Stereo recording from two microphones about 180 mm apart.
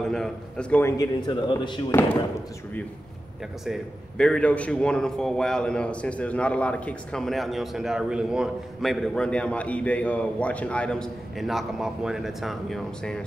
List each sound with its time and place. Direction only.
0.0 s a man's voice: 5° left (ahead or behind)
1.2 s a man's voice: 25° left (ahead or behind)
3.6 s a man's voice: centre (ahead or behind)